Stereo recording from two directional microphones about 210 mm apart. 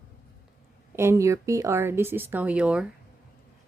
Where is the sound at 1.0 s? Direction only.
15° right (ahead or behind).